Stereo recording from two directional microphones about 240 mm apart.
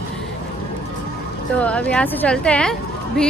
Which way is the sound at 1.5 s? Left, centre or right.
Centre.